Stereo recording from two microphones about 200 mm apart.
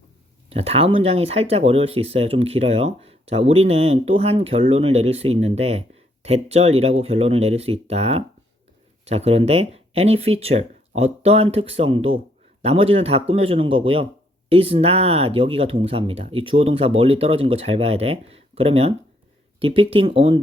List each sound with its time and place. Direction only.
0.5 s speech: 30° right (ahead or behind)